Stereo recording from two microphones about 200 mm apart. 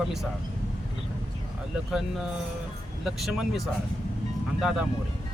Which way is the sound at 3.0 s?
Centre (ahead or behind).